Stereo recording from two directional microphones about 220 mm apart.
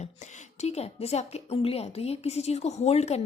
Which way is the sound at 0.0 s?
30° left (ahead or behind).